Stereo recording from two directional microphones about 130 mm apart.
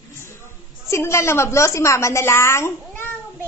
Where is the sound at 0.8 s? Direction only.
20° left (ahead or behind).